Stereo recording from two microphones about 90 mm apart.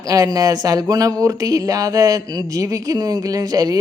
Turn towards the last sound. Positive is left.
turn(degrees=-45)  # may be behind; listen again after turning